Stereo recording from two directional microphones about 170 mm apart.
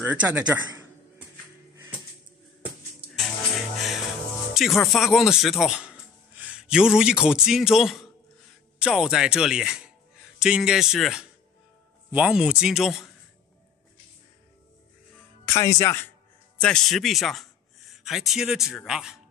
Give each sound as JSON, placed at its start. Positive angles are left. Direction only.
{"t": 0.0, "sound": "a man's voice", "side_deg": -10}
{"t": 3.2, "sound": "music", "side_deg": 0}
{"t": 4.6, "sound": "speech", "side_deg": 0}
{"t": 15.4, "sound": "speech", "side_deg": 15}
{"t": 16.6, "sound": "speech", "side_deg": 5}